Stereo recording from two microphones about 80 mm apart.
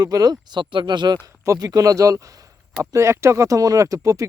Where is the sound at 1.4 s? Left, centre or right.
Right.